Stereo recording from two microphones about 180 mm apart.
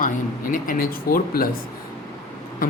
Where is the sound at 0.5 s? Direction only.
50° left (ahead or behind).